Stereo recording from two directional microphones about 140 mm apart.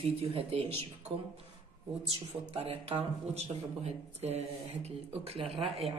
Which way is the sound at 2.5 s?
45° right (ahead or behind).